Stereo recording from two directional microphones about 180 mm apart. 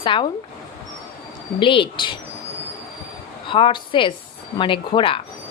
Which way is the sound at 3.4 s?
25° left (ahead or behind).